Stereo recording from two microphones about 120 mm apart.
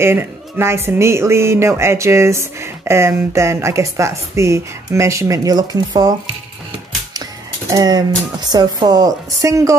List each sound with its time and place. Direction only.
0.0 s speech: 20° right (ahead or behind)
7.7 s speech: 30° right (ahead or behind)